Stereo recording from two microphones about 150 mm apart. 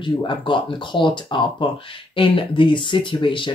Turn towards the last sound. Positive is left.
turn(degrees=35)  # may be behind; listen again after turning